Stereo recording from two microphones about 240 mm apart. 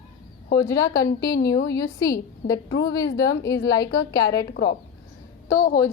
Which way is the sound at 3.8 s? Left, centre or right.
Left.